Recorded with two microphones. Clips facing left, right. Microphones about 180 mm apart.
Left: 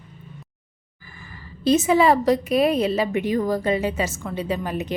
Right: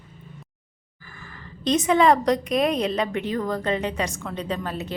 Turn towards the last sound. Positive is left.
turn(degrees=15)  # may be behind; listen again after turning